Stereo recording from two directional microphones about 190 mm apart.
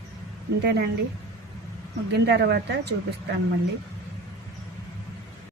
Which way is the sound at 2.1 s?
60° right (ahead or behind).